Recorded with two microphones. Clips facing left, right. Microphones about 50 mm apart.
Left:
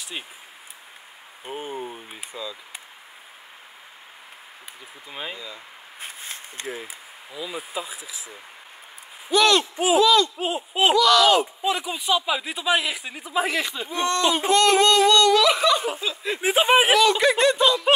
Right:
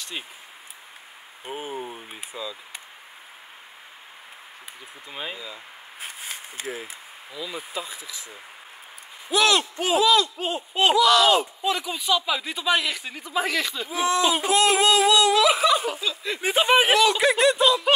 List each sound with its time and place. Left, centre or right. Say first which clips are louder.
1.4 s a sound: left 1 dB; centre
5.1 s a sound: even; centre
6.5 s speech: left 1 dB; centre
7.3 s speech: left 1 dB; centre
9.3 s speech: left 2 dB; centre
10.3 s speech: left 1 dB; centre
11.0 s speech: left 1 dB; centre
13.8 s speech: right 1 dB; centre
15.9 s speech: left 1 dB; centre
16.7 s speech: left 1 dB; centre